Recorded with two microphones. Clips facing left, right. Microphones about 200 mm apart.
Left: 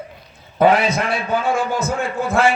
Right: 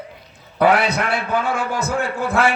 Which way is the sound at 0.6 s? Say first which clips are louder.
Left 1 dB; 70° right (ahead or behind).